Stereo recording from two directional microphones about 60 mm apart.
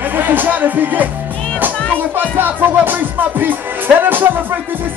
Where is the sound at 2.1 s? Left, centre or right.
Right.